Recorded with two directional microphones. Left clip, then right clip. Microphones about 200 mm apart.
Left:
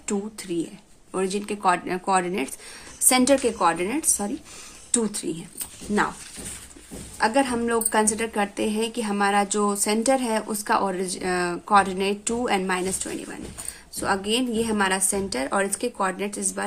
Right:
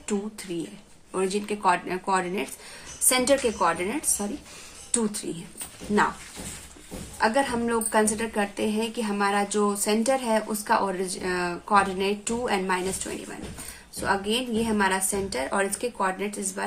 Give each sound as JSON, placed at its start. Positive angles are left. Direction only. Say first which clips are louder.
{"t": 0.1, "sound": "a woman's voice", "louder": "left 2 dB", "side_deg": 30}
{"t": 7.2, "sound": "a woman's voice", "louder": "left 2 dB", "side_deg": 35}